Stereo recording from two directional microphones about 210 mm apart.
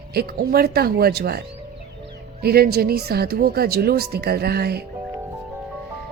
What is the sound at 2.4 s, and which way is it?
Speech, 50° right (ahead or behind).